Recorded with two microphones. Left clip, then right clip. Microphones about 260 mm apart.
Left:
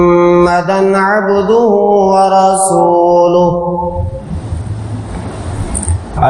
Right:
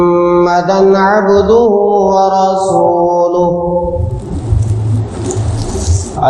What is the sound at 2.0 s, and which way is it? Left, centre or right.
Mantra, left.